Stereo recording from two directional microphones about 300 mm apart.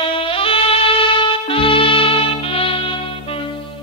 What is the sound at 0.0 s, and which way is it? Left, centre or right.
Saxophone, centre.